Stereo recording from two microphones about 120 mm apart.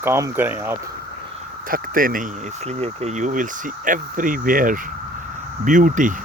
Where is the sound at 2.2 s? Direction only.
60° right (ahead or behind); by 4.3 s 90° right.